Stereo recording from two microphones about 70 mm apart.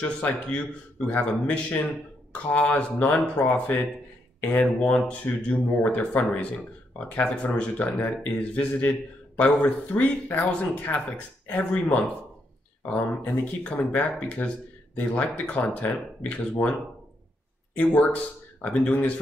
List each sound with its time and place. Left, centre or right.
0.0 s speech: centre
17.7 s speech: left